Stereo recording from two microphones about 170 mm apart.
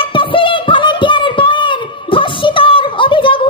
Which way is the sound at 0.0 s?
30° left (ahead or behind).